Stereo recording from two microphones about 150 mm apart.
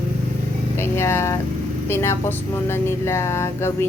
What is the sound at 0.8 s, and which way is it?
Speech, 15° left (ahead or behind).